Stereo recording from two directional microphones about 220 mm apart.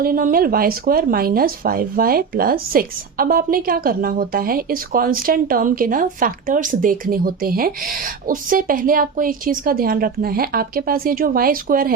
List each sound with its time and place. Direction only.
0.0 s speech: 40° right (ahead or behind)